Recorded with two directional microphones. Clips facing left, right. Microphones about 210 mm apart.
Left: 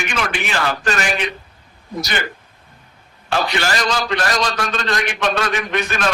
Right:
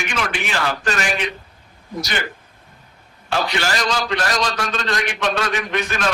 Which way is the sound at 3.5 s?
60° left (ahead or behind).